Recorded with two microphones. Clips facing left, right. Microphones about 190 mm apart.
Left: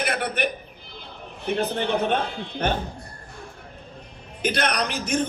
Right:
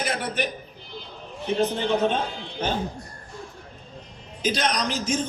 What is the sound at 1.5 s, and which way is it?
Speech, 60° left (ahead or behind).